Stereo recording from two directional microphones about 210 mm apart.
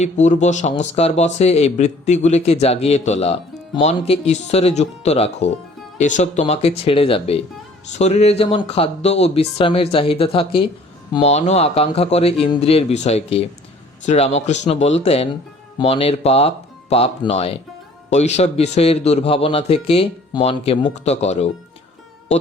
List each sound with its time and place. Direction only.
0.0 s a man's voice: 35° left (ahead or behind)